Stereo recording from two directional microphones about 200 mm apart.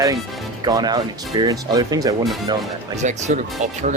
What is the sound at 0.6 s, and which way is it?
Speech, 20° right (ahead or behind).